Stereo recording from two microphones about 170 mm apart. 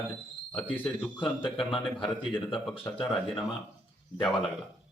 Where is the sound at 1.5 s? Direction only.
30° left (ahead or behind).